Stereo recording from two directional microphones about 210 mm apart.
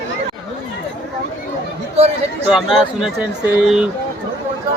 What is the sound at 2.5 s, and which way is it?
Speech, centre (ahead or behind).